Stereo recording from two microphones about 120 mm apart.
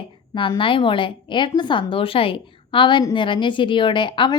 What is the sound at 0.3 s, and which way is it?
A woman's voice, 45° left (ahead or behind).